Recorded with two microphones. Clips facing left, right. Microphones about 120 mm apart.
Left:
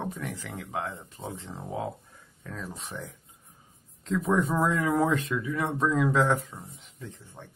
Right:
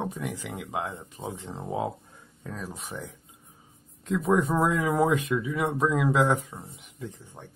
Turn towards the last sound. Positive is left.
turn(degrees=-15)  # may be behind; listen again after turning